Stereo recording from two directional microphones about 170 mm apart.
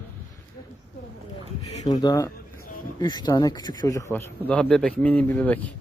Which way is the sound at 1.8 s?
25° left (ahead or behind).